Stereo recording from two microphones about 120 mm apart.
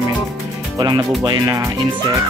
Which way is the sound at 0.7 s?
35° right (ahead or behind).